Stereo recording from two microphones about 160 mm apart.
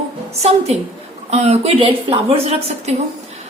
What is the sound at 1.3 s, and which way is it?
A woman's voice, 45° right (ahead or behind).